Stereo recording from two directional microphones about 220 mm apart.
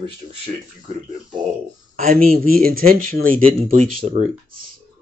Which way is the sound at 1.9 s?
35° right (ahead or behind).